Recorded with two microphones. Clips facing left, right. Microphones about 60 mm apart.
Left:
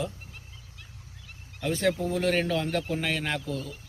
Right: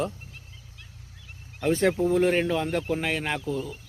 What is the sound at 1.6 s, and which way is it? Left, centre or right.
Speech, right.